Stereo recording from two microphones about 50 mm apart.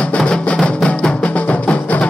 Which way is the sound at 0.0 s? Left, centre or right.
Left.